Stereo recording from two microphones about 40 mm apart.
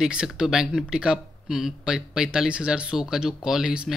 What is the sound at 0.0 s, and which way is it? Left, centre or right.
Speech, centre.